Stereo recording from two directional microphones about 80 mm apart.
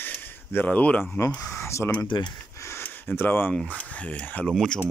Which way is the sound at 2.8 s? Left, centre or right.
Left.